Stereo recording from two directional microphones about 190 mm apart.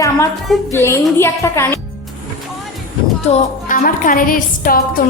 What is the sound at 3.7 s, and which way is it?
A woman's voice, 45° left (ahead or behind).